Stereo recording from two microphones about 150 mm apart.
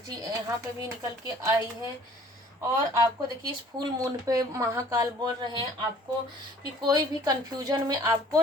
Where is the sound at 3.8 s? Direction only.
25° right (ahead or behind).